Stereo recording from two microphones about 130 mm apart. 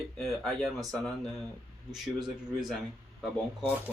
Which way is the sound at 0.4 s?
Centre (ahead or behind).